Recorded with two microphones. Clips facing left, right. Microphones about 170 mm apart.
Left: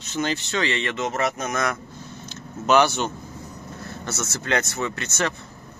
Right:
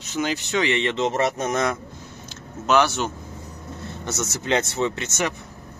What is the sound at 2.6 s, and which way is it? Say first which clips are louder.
Speech: left 1 dB; centre (ahead or behind).